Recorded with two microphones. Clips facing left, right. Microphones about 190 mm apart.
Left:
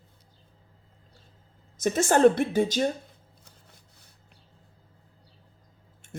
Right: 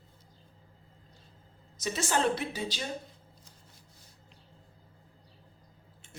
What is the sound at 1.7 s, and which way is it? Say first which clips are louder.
Speech: left 8 dB; 50° left (ahead or behind).